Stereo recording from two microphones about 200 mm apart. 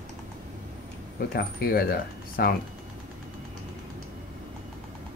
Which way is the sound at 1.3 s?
50° left (ahead or behind).